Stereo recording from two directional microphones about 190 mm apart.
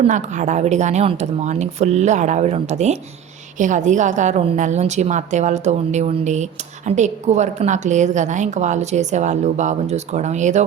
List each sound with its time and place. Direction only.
0.0 s a woman's voice: 40° right (ahead or behind)